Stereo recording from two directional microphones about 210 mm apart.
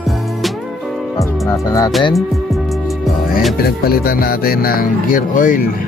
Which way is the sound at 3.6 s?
45° left (ahead or behind).